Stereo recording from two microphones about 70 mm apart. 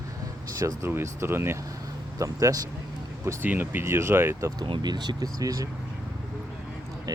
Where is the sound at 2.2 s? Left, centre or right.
Right.